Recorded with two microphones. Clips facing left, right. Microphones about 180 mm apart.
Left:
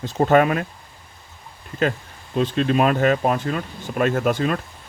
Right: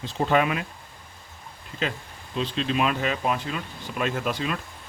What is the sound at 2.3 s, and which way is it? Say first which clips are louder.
Speech: left 6 dB; 50° left (ahead or behind).